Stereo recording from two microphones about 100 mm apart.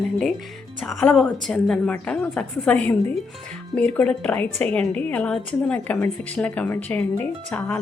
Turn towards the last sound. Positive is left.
turn(degrees=20)  # may be behind; listen again after turning